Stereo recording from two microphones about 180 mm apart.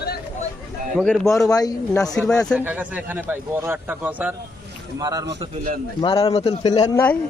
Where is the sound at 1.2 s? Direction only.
20° left (ahead or behind).